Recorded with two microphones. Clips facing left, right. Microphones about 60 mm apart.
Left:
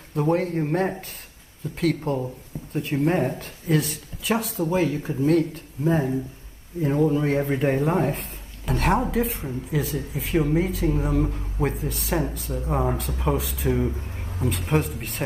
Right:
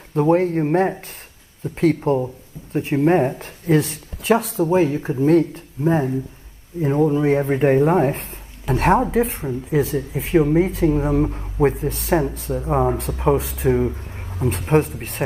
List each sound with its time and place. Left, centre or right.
0.1 s speech: right
3.4 s speech: right
6.9 s speech: centre; by 12.6 s right
12.6 s speech: right
14.4 s speech: right